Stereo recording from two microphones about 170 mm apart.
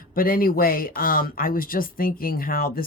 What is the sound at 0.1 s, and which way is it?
Speech, 60° left (ahead or behind).